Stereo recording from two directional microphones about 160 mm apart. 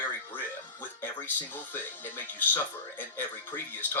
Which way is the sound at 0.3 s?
15° left (ahead or behind).